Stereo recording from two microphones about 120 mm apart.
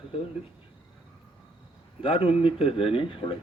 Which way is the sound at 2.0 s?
50° left (ahead or behind).